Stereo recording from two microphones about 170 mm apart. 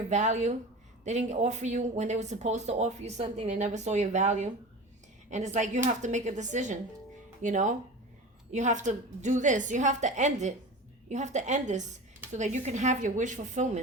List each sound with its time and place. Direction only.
0.1 s speech: 45° right (ahead or behind)